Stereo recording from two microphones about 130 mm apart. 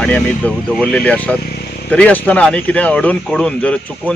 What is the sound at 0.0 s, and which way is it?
Speech, 10° left (ahead or behind).